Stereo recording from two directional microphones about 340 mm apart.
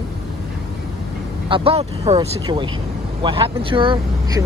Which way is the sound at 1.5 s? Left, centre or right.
Centre.